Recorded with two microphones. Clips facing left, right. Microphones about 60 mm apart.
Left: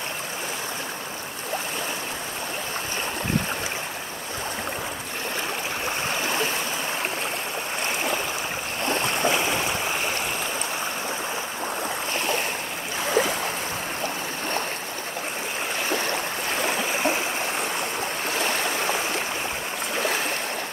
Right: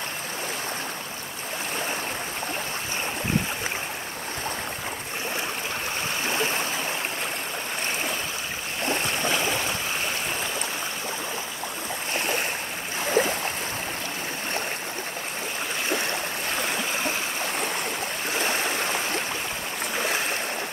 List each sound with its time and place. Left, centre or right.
8.8 s boat: left
13.2 s stream: left
16.6 s stream: centre